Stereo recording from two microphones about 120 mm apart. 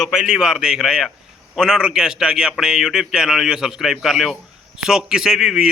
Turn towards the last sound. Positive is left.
turn(degrees=-5)  # may be behind; listen again after turning